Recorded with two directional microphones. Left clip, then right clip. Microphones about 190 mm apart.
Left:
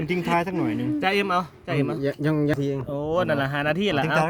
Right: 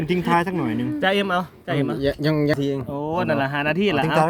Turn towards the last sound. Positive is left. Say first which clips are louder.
# right 3 dB
turn(degrees=5)  # may be behind; listen again after turning